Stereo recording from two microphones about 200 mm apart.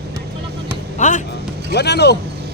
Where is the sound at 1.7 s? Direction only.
55° left (ahead or behind).